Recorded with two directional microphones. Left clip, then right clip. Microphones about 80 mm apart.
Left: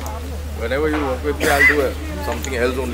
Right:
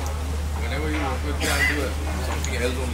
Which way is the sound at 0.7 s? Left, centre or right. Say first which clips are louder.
Left 8 dB; left.